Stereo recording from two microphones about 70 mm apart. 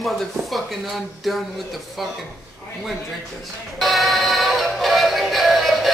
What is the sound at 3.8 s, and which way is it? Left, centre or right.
Synthetic singing, centre.